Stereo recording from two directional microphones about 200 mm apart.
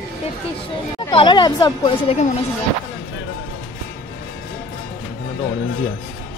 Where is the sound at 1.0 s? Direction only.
25° left (ahead or behind).